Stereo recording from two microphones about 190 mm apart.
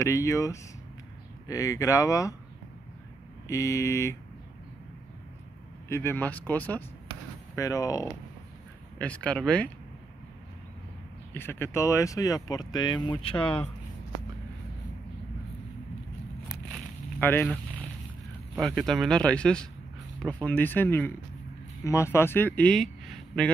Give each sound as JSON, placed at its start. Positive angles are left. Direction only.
{"t": 0.0, "sound": "speech", "side_deg": 15}
{"t": 3.4, "sound": "speech", "side_deg": 15}
{"t": 5.9, "sound": "speech", "side_deg": 15}
{"t": 8.9, "sound": "speech", "side_deg": 5}
{"t": 11.3, "sound": "speech", "side_deg": 10}
{"t": 17.2, "sound": "speech", "side_deg": 10}